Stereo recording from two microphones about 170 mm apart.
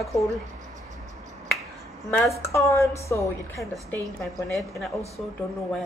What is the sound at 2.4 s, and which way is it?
A woman's voice, 15° left (ahead or behind).